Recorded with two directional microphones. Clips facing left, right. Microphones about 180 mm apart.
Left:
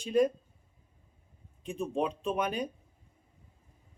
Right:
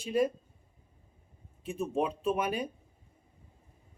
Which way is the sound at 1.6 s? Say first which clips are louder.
Right 1 dB; 5° right (ahead or behind).